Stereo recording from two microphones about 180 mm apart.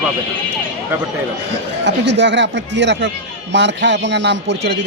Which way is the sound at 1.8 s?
75° right (ahead or behind).